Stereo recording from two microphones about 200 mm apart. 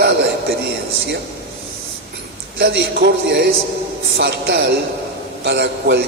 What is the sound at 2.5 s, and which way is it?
A man's voice, 60° right (ahead or behind).